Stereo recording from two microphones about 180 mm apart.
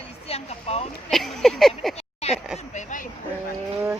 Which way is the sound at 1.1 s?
Centre (ahead or behind).